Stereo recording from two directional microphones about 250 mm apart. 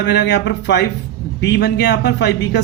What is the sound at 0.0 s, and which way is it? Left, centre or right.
Speech, left.